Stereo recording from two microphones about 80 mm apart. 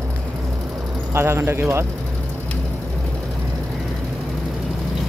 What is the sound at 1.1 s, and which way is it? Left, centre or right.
Speech, right.